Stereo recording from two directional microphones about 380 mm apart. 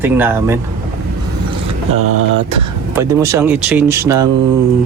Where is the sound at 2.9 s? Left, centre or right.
Centre.